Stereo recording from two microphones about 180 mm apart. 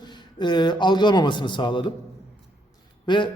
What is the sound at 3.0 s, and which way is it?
Speech, 25° left (ahead or behind).